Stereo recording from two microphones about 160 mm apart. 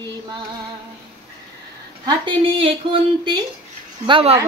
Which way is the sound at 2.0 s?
30° right (ahead or behind).